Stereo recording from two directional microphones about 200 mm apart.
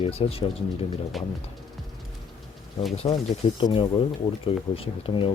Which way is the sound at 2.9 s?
30° left (ahead or behind).